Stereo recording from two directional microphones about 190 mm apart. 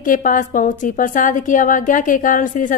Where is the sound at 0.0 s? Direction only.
45° left (ahead or behind).